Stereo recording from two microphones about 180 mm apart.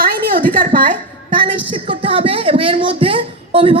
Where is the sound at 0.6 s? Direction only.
50° right (ahead or behind).